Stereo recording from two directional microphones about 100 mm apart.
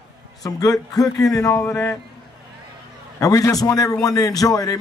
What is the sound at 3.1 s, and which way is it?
A man's voice, 35° left (ahead or behind).